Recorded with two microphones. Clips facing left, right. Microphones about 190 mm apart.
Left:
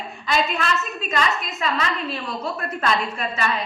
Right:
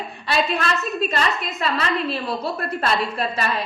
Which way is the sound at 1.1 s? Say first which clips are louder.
Even; 35° right (ahead or behind).